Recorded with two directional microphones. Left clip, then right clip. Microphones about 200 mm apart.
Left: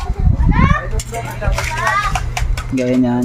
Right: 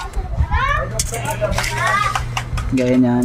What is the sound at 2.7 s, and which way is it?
Speech, centre (ahead or behind).